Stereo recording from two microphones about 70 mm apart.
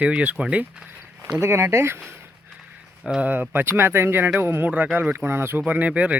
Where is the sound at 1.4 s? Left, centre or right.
Right.